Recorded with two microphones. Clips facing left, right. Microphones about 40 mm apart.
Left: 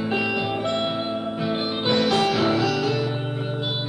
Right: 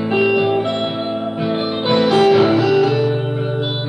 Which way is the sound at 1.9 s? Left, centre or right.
Centre.